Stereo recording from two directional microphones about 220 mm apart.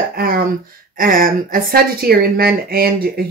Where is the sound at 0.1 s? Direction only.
40° right (ahead or behind).